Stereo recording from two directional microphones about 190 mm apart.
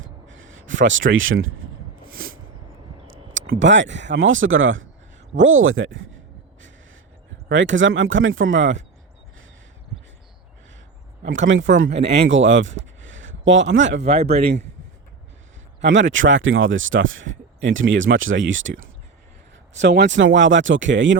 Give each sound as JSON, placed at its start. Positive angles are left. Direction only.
{"t": 0.0, "sound": "a sound", "side_deg": -90}
{"t": 3.3, "sound": "speech", "side_deg": -85}
{"t": 7.4, "sound": "speech", "side_deg": -80}
{"t": 11.3, "sound": "speech", "side_deg": -75}
{"t": 11.9, "sound": "speech", "side_deg": -30}
{"t": 12.3, "sound": "speech", "side_deg": -75}
{"t": 14.0, "sound": "speech", "side_deg": -30}
{"t": 15.8, "sound": "speech", "side_deg": -75}
{"t": 19.7, "sound": "speech", "side_deg": -70}